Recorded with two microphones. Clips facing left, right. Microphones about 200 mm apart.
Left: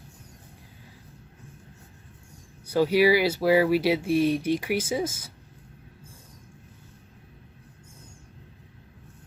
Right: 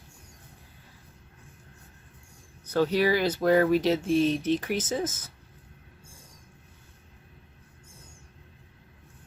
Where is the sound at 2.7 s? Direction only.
10° left (ahead or behind).